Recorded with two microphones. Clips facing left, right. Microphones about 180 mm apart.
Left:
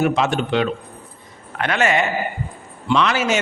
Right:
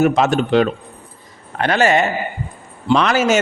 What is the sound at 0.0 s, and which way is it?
A man's voice, 45° right (ahead or behind).